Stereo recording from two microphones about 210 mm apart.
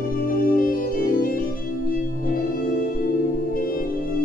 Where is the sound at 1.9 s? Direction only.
40° left (ahead or behind).